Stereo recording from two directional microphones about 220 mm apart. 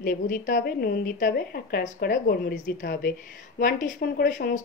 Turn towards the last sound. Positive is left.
turn(degrees=35)  # may be behind; listen again after turning